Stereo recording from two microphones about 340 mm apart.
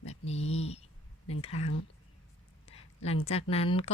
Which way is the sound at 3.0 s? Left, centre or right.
Centre.